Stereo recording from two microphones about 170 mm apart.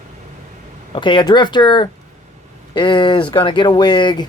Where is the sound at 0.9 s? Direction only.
30° left (ahead or behind).